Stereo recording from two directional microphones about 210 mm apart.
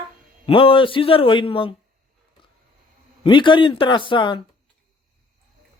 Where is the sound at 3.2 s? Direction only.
25° left (ahead or behind).